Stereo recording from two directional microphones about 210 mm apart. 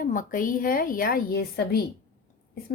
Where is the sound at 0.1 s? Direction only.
40° left (ahead or behind).